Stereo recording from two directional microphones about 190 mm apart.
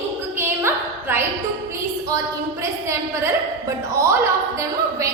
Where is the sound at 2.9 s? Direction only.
15° right (ahead or behind).